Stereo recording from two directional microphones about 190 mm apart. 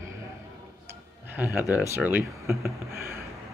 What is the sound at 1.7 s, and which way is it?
Speech, 10° right (ahead or behind).